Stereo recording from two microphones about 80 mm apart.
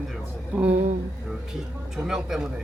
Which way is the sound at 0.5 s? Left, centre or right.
Centre.